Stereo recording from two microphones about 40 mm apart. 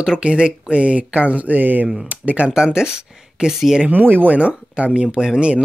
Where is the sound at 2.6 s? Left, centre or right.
Centre.